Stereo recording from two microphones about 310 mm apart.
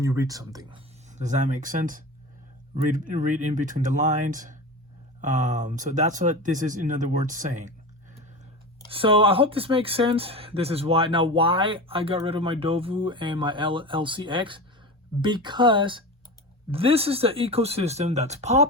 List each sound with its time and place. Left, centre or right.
0.0 s speech: centre
1.1 s speech: right
8.9 s speech: centre